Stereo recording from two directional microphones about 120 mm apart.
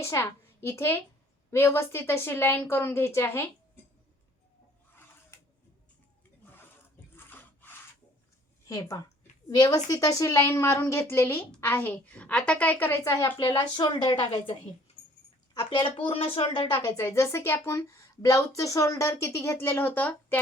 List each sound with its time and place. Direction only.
0.0 s a woman's voice: 25° left (ahead or behind)
5.3 s tick-tock: 20° left (ahead or behind)
6.4 s a sound: 15° left (ahead or behind)
7.3 s wood: 15° left (ahead or behind)
9.5 s a woman's voice: 30° left (ahead or behind); by 13.0 s 15° left (ahead or behind)
13.1 s speech: 25° left (ahead or behind)
13.4 s a woman's voice: 40° left (ahead or behind)
15.5 s a woman's voice: 45° left (ahead or behind)
16.7 s speech: 20° left (ahead or behind)